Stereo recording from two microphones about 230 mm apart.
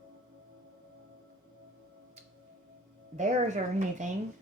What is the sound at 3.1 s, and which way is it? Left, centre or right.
Speech, right.